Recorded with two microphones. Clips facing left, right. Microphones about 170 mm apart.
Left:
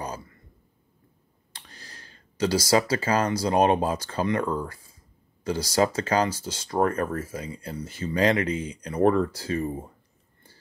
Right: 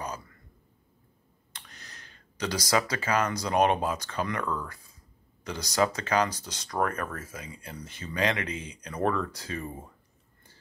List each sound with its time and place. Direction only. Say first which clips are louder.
1.5 s speech: left 2 dB; 30° left (ahead or behind)